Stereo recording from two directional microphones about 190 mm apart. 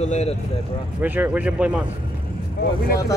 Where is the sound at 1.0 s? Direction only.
10° right (ahead or behind).